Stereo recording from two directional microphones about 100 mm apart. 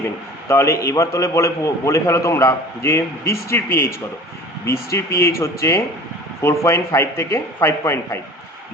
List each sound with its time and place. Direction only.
0.4 s a man's voice: 30° left (ahead or behind)